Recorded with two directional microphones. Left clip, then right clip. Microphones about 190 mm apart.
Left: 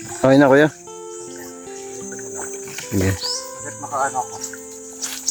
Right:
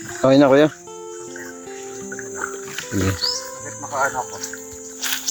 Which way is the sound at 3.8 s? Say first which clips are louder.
Even; centre (ahead or behind).